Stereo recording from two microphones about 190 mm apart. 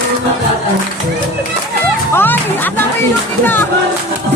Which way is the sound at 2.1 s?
10° left (ahead or behind).